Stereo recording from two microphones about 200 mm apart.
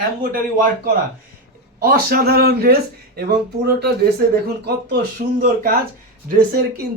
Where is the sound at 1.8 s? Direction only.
50° right (ahead or behind).